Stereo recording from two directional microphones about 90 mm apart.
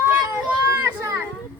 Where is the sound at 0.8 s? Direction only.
30° right (ahead or behind).